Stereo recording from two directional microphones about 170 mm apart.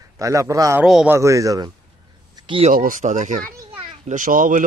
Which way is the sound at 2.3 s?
30° right (ahead or behind).